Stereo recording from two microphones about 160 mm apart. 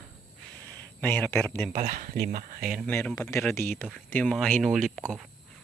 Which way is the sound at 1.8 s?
60° right (ahead or behind).